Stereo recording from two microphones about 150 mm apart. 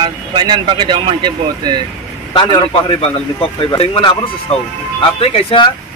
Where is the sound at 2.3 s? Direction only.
35° left (ahead or behind).